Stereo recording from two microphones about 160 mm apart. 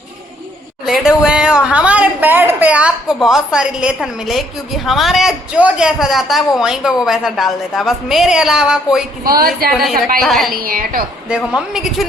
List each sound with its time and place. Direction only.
0.9 s speech: centre (ahead or behind)
9.2 s a woman's voice: 70° right (ahead or behind)
10.2 s a woman's voice: centre (ahead or behind)
10.5 s a woman's voice: 65° right (ahead or behind)
11.3 s a woman's voice: 5° right (ahead or behind)